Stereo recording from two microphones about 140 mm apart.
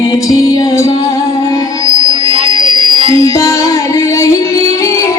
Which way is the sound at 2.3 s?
45° right (ahead or behind).